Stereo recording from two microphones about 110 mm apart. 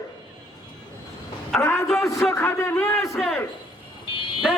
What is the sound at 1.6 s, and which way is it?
A man's voice, 20° left (ahead or behind).